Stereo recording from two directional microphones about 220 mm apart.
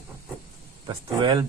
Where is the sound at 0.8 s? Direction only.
20° right (ahead or behind).